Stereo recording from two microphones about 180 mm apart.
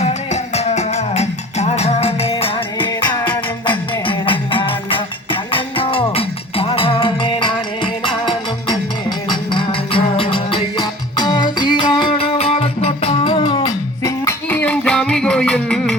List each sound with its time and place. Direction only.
0.5 s music: 35° left (ahead or behind)
14.0 s music: 10° left (ahead or behind)